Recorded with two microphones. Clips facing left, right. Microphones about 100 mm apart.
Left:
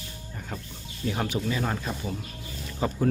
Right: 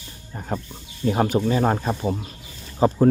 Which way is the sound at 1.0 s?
40° right (ahead or behind).